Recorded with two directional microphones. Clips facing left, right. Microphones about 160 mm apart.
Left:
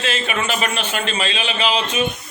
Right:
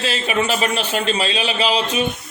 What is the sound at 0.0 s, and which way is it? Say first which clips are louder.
A man's voice: right 2 dB; 35° right (ahead or behind).